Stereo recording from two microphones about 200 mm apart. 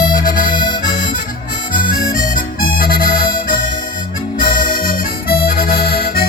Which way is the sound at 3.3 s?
45° left (ahead or behind).